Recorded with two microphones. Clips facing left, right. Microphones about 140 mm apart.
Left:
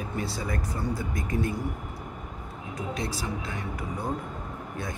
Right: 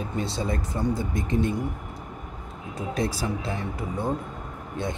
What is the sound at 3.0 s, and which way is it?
Speech, 40° right (ahead or behind).